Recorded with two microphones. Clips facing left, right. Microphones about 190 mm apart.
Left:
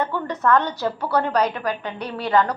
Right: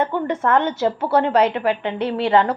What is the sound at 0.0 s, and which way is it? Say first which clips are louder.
A woman's voice: right 3 dB; 25° right (ahead or behind).